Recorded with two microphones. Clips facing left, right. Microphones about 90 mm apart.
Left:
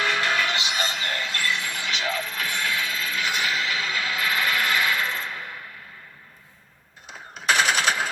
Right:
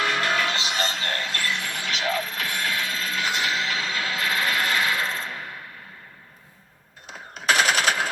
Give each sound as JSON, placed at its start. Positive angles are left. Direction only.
{"t": 0.0, "sound": "music", "side_deg": -40}
{"t": 4.6, "sound": "a sound", "side_deg": -35}
{"t": 7.1, "sound": "machine gun", "side_deg": -40}